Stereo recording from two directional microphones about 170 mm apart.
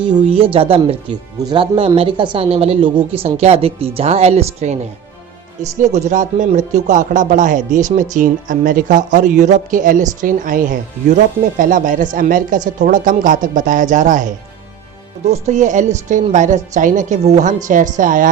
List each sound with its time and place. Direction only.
0.1 s a woman's voice: 35° right (ahead or behind)
5.8 s a woman's voice: 45° right (ahead or behind)